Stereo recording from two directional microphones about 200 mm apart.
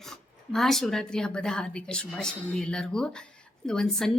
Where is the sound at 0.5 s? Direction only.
Centre (ahead or behind).